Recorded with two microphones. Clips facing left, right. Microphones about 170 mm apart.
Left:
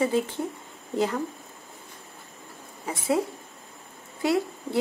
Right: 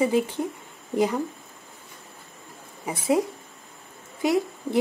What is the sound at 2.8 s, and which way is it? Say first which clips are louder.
Speech: right 3 dB; 20° right (ahead or behind).